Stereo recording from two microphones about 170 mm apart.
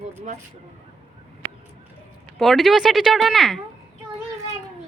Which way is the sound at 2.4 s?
Centre (ahead or behind).